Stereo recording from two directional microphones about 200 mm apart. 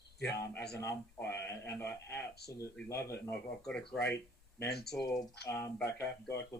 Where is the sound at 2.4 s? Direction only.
55° left (ahead or behind).